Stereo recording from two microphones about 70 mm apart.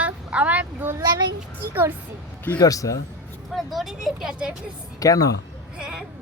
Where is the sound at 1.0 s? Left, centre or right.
Right.